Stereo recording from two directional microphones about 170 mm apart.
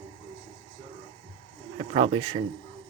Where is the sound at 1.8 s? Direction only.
40° right (ahead or behind).